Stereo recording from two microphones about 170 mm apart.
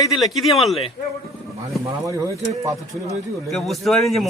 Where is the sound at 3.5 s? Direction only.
Centre (ahead or behind).